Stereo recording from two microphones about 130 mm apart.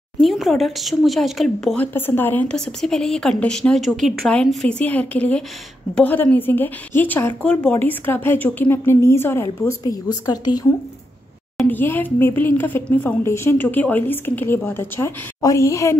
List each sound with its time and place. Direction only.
0.2 s speech: centre (ahead or behind)
2.0 s a woman's voice: 15° left (ahead or behind); by 10.7 s 30° left (ahead or behind)
11.7 s a woman's voice: 15° left (ahead or behind)